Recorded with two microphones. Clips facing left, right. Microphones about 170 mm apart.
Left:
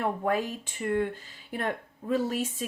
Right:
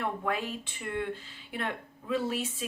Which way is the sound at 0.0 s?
40° left (ahead or behind).